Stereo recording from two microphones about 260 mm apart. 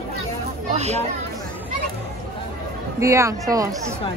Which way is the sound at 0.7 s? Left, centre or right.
Right.